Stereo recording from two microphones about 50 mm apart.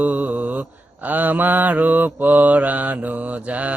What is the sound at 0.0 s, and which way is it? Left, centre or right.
Mantra, right.